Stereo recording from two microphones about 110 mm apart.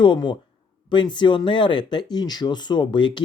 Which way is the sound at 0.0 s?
45° left (ahead or behind).